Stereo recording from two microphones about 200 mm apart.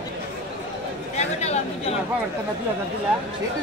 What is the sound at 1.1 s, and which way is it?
Speech, 35° left (ahead or behind).